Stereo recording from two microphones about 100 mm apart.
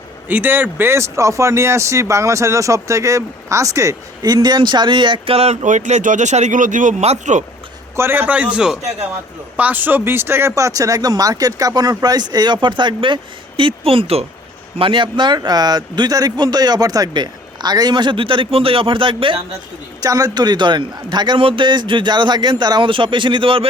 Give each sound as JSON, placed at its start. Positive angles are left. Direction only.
{"t": 0.3, "sound": "speech", "side_deg": -20}
{"t": 7.0, "sound": "speech", "side_deg": -90}
{"t": 7.9, "sound": "a man's voice", "side_deg": -20}
{"t": 13.6, "sound": "speech", "side_deg": -60}
{"t": 14.8, "sound": "a man's voice", "side_deg": -60}
{"t": 20.0, "sound": "a man's voice", "side_deg": -40}